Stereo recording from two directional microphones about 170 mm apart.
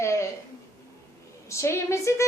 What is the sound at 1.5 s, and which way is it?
Speech, 15° left (ahead or behind).